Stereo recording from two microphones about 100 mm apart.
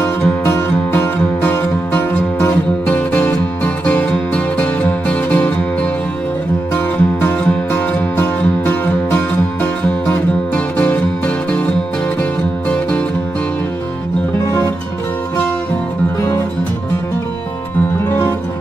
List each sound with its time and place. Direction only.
0.2 s music: 25° left (ahead or behind)